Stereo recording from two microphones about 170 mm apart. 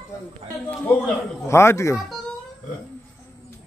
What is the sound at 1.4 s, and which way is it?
Speech, 15° left (ahead or behind).